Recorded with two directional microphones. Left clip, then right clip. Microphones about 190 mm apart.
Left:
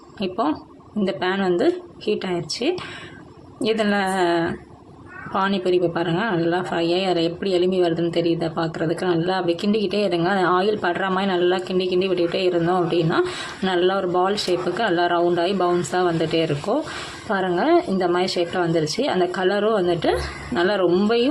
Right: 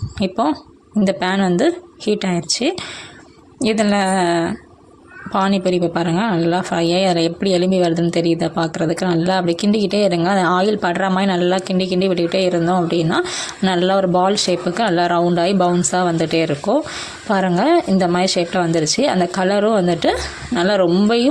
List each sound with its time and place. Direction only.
0.2 s a woman's voice: 30° right (ahead or behind)